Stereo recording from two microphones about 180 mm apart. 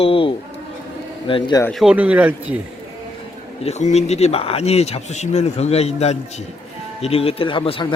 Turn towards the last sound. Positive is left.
turn(degrees=30)  # may be behind; listen again after turning